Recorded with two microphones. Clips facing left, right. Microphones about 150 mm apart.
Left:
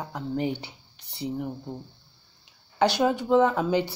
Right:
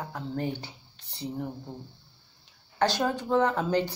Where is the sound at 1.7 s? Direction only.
15° left (ahead or behind).